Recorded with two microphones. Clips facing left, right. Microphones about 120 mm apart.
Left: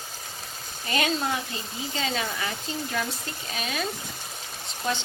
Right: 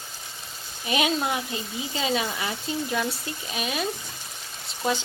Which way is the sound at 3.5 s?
15° right (ahead or behind).